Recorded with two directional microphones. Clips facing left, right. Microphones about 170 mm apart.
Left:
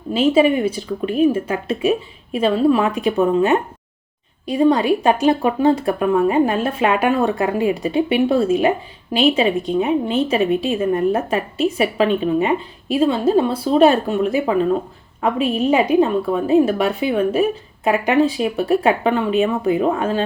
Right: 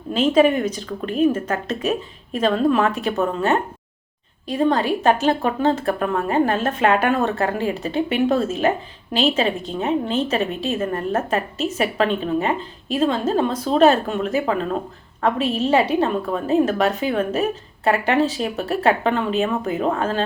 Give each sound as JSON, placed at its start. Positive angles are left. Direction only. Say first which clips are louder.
{"t": 0.1, "sound": "speech", "louder": "left 1 dB", "side_deg": 10}